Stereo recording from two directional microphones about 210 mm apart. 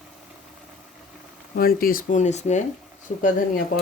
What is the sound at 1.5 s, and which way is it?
Speech, 45° left (ahead or behind).